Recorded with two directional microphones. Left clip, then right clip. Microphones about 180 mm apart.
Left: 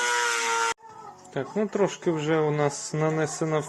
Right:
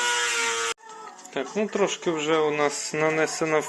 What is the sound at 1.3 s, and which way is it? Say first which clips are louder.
Speech: right 1 dB; 30° left (ahead or behind).